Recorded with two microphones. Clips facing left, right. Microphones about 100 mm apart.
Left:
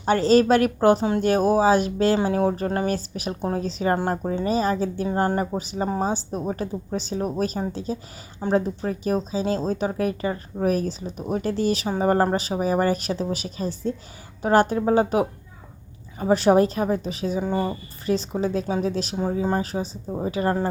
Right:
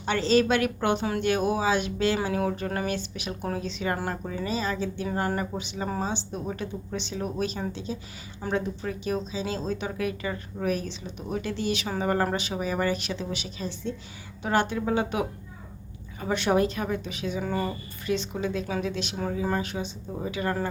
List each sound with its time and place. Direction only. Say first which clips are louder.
0.0 s speech: left 5 dB; 40° left (ahead or behind)
17.4 s speech: left 4 dB; 25° left (ahead or behind)
19.1 s speech: left 3 dB; 25° left (ahead or behind)